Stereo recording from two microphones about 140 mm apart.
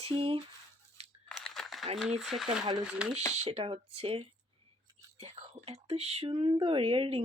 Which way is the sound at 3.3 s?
50° right (ahead or behind).